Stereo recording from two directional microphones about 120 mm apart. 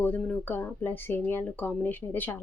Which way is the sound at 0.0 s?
15° left (ahead or behind).